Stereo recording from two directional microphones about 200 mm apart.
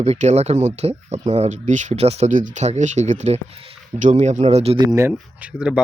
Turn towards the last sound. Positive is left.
turn(degrees=-5)  # may be behind; listen again after turning